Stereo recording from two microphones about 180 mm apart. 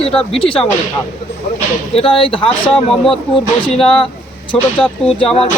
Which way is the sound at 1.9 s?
30° left (ahead or behind).